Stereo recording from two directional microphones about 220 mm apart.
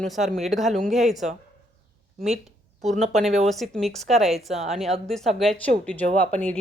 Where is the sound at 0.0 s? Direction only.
Centre (ahead or behind).